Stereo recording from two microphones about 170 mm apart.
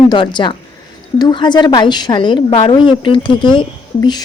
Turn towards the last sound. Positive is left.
turn(degrees=25)  # may be behind; listen again after turning